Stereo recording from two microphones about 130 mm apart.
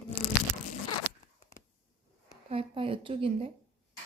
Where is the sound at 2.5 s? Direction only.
45° right (ahead or behind).